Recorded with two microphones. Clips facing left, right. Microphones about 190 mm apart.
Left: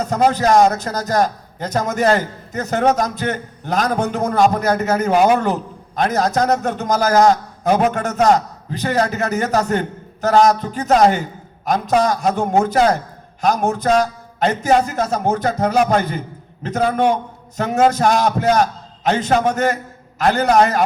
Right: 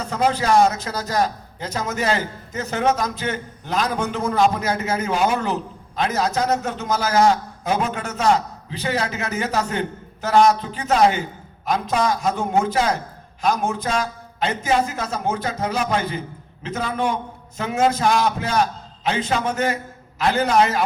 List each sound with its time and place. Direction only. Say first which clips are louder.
0.0 s a man's voice: left 5 dB; 45° left (ahead or behind)